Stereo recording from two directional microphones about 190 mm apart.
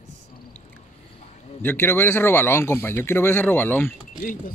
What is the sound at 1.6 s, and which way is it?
A man's voice, 10° left (ahead or behind).